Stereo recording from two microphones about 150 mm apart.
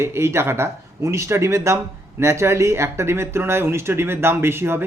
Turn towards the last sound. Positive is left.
turn(degrees=-15)  # may be behind; listen again after turning